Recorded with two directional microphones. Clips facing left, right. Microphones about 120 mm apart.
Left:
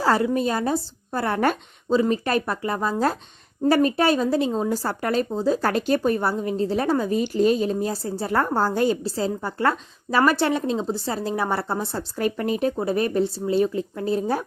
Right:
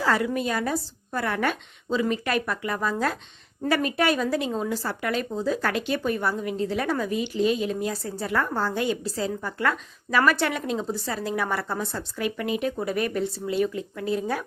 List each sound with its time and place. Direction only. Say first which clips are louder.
0.0 s speech: left 4 dB; 35° left (ahead or behind)
7.2 s speech: left 3 dB; 40° left (ahead or behind)